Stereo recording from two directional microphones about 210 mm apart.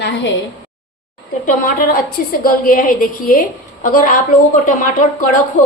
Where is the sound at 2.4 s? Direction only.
40° left (ahead or behind).